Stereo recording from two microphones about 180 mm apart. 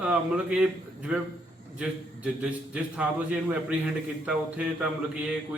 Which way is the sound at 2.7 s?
5° right (ahead or behind).